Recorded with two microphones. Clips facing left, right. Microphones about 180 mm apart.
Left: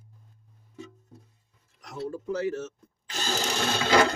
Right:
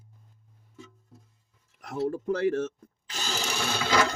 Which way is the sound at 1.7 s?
55° right (ahead or behind).